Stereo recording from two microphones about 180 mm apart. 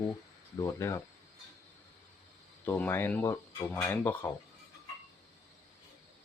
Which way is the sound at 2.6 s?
10° left (ahead or behind).